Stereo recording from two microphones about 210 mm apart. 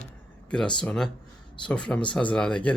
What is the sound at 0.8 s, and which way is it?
Speech, 5° left (ahead or behind).